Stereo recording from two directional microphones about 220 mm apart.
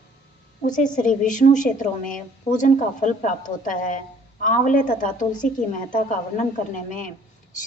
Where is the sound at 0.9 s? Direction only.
35° left (ahead or behind).